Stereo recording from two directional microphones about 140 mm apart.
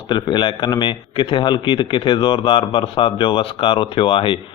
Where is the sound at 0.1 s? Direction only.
35° left (ahead or behind).